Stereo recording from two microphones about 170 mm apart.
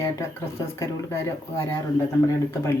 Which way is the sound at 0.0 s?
15° left (ahead or behind).